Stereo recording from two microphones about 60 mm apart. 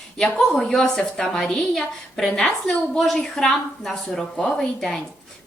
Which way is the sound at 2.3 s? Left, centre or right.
Centre.